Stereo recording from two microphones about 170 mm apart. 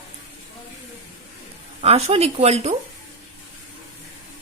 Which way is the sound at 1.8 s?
40° right (ahead or behind).